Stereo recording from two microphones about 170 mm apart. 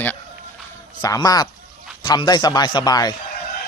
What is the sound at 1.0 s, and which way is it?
A man's voice, 20° left (ahead or behind).